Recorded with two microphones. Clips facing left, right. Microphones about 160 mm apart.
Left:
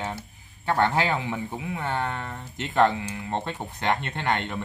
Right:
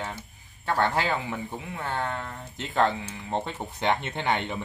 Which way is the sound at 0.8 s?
15° left (ahead or behind).